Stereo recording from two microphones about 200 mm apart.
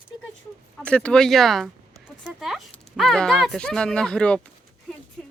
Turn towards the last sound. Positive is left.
turn(degrees=5)  # may be behind; listen again after turning